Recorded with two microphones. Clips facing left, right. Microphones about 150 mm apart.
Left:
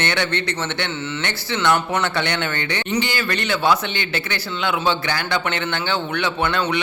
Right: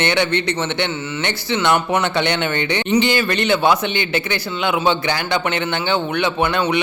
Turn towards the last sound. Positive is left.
turn(degrees=-15)  # may be behind; listen again after turning